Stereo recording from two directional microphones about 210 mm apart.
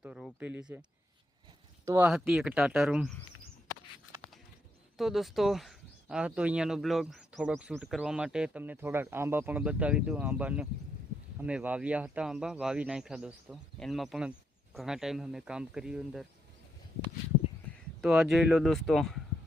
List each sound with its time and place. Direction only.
0.0 s a sound: 5° right (ahead or behind)
0.3 s speech: 10° right (ahead or behind)
4.9 s speech: centre (ahead or behind)
18.0 s speech: centre (ahead or behind)